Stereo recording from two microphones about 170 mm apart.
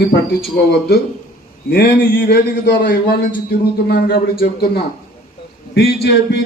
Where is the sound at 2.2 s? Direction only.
75° left (ahead or behind).